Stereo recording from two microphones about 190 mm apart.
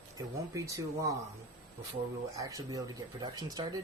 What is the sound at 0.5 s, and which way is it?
Speech, 15° right (ahead or behind).